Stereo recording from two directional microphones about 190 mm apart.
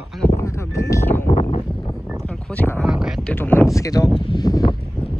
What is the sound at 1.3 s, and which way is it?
Wind noise, 35° left (ahead or behind).